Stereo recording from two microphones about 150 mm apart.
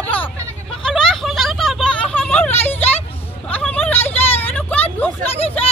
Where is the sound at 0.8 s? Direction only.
5° left (ahead or behind).